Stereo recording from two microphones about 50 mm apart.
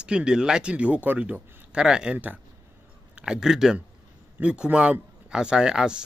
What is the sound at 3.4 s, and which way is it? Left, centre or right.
Speech, centre.